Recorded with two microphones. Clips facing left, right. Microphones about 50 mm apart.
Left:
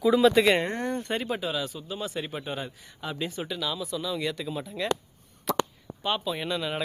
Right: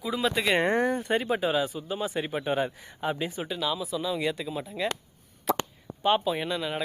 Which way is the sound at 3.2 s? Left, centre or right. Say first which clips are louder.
Right 1 dB; centre.